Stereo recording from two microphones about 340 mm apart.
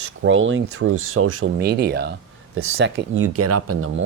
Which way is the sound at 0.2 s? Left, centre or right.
Right.